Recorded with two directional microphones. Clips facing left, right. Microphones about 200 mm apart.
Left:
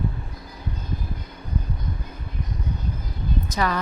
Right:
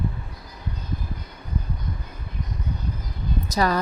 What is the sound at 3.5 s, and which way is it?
Speech, 40° right (ahead or behind).